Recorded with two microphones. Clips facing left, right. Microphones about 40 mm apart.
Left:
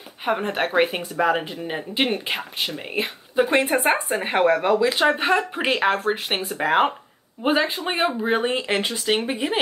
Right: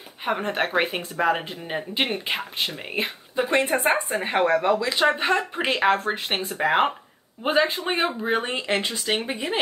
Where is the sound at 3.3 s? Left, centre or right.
Centre.